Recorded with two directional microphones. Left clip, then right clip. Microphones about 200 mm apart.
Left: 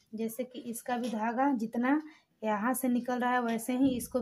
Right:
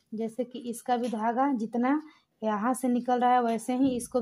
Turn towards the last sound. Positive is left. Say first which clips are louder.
# right 2 dB
turn(degrees=-30)  # may be behind; listen again after turning